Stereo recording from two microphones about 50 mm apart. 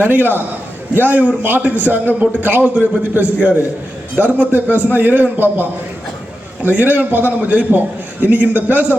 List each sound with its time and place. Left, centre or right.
0.0 s a man's voice: right